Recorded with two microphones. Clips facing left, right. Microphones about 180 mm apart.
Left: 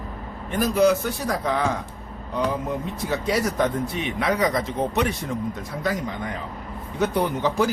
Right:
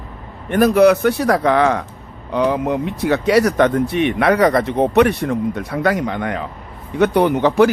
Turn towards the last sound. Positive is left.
turn(degrees=-70)  # may be behind; listen again after turning